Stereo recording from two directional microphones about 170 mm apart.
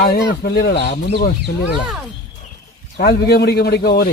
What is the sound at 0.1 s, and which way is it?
Speech, 70° left (ahead or behind).